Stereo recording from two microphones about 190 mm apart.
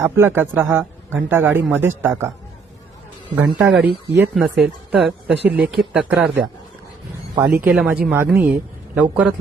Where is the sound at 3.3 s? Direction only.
5° right (ahead or behind).